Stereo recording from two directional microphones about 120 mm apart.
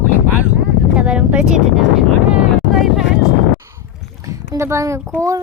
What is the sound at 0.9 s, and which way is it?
Speech, 10° right (ahead or behind).